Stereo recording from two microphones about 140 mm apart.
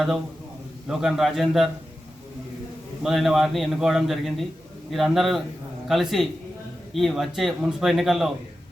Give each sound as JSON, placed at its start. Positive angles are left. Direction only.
{"t": 0.9, "sound": "a man's voice", "side_deg": 0}
{"t": 3.0, "sound": "a man's voice", "side_deg": 0}